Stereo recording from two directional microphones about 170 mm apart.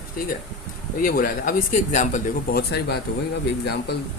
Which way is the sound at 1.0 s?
55° left (ahead or behind).